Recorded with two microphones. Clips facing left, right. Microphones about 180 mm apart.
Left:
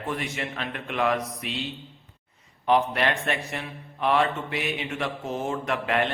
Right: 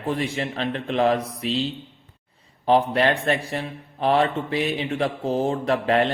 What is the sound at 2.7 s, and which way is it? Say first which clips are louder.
Speech: right 4 dB; 30° right (ahead or behind).